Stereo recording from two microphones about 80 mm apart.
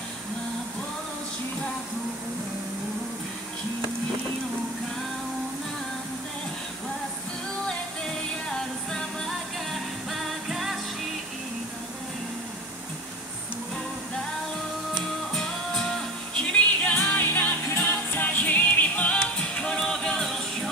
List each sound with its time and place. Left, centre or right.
8.5 s music: centre
15.3 s music: centre
16.5 s music: centre